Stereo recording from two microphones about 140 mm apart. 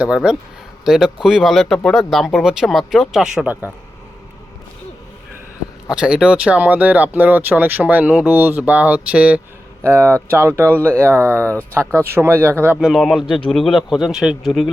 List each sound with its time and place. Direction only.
0.0 s speech: 5° right (ahead or behind)
5.9 s speech: 5° right (ahead or behind)
12.9 s speech: centre (ahead or behind)